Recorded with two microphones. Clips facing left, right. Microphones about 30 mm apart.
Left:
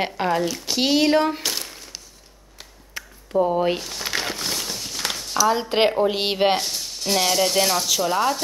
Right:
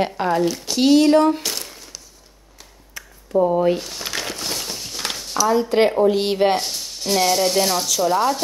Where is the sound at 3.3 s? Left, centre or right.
Centre.